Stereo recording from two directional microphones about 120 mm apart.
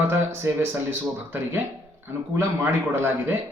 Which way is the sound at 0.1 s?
20° right (ahead or behind).